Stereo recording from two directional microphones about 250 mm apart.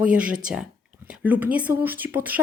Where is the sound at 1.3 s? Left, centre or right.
Centre.